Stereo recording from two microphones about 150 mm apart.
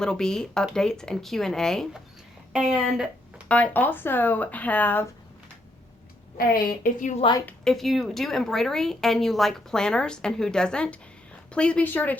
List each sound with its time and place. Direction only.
0.0 s speech: 5° left (ahead or behind)
3.5 s speech: 10° left (ahead or behind)
6.3 s a woman's voice: 75° left (ahead or behind)
7.4 s speech: 5° left (ahead or behind)